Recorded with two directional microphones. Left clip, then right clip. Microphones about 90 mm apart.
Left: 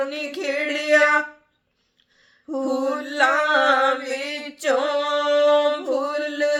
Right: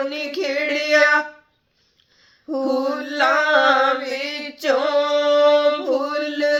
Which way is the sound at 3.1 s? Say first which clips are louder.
Right 1 dB; 50° left (ahead or behind).